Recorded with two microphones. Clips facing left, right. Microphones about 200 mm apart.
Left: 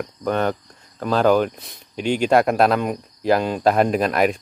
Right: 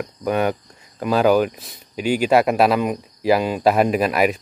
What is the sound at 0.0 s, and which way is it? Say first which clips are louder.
Speech: right 1 dB; 10° right (ahead or behind).